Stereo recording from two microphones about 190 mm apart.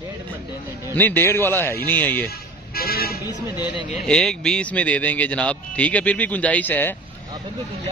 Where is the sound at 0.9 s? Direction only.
10° left (ahead or behind).